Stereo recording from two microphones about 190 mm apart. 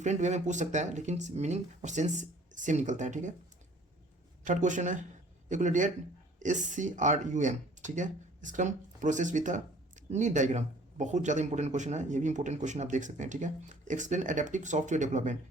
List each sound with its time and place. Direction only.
0.0 s speech: 40° right (ahead or behind)
4.4 s speech: 40° right (ahead or behind)